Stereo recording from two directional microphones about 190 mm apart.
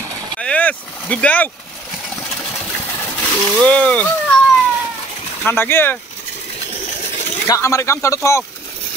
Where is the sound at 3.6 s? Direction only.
5° left (ahead or behind).